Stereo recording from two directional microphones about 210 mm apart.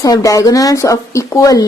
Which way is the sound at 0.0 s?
15° left (ahead or behind).